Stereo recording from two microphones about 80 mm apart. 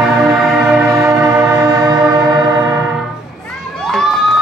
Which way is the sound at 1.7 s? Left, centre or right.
Right.